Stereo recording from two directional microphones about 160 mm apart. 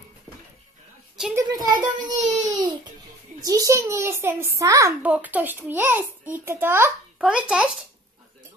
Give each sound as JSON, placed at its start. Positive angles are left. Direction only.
{"t": 1.3, "sound": "a child's voice", "side_deg": -25}
{"t": 5.0, "sound": "a child's voice", "side_deg": -10}